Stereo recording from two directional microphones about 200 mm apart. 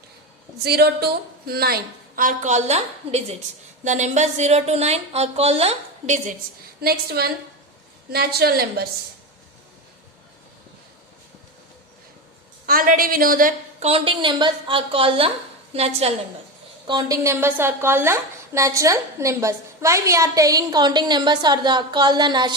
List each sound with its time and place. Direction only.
0.6 s a woman's voice: 55° right (ahead or behind); by 6.3 s 35° right (ahead or behind)
6.8 s a woman's voice: 50° right (ahead or behind)
12.6 s a woman's voice: 45° right (ahead or behind)
16.8 s a woman's voice: 20° right (ahead or behind)